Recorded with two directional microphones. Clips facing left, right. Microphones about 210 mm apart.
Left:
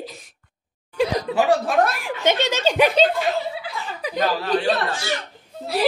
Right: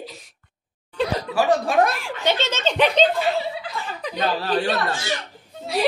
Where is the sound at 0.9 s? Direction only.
15° left (ahead or behind).